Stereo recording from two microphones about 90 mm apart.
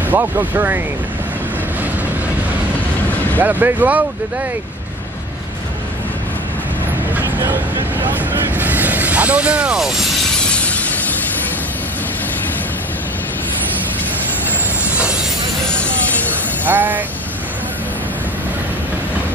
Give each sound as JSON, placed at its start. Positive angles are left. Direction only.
{"t": 0.1, "sound": "speech", "side_deg": -25}
{"t": 3.3, "sound": "speech", "side_deg": -20}
{"t": 8.0, "sound": "speech", "side_deg": -20}
{"t": 16.6, "sound": "speech", "side_deg": -20}